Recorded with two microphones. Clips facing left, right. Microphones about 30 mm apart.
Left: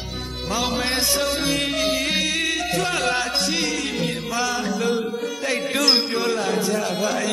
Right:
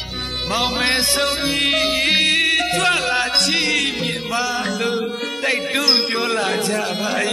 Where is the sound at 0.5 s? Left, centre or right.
Right.